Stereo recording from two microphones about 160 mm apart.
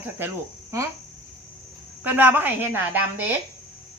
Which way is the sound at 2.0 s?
10° right (ahead or behind).